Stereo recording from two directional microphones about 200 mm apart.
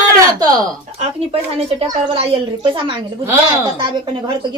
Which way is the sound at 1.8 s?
30° right (ahead or behind).